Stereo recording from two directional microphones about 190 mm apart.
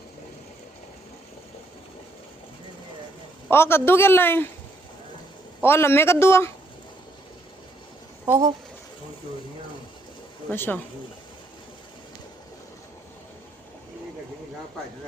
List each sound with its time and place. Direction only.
3.5 s a man's voice: 10° left (ahead or behind)
5.6 s a man's voice: 15° left (ahead or behind)
8.2 s speech: 20° right (ahead or behind)
10.5 s a man's voice: 10° left (ahead or behind)